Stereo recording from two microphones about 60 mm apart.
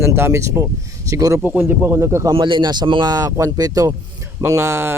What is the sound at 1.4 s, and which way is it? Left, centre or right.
Speech, right.